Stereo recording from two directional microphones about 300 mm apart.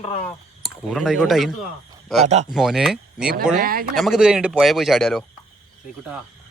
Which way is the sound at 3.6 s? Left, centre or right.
Right.